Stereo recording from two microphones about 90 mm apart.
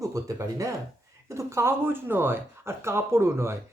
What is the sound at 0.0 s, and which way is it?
Speech, 40° right (ahead or behind).